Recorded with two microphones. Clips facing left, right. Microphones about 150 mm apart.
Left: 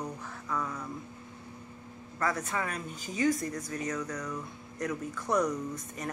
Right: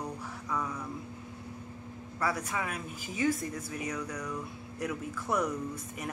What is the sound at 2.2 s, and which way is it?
Speech, 10° right (ahead or behind).